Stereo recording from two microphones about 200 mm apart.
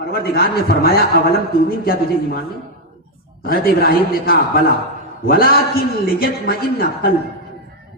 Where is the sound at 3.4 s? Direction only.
50° left (ahead or behind).